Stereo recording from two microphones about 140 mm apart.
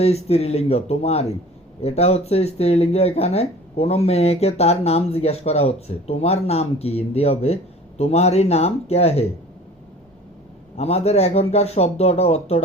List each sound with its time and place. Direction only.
0.0 s speech: 50° left (ahead or behind)
10.8 s speech: 50° left (ahead or behind)